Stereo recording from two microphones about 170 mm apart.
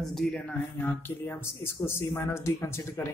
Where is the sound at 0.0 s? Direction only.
Centre (ahead or behind).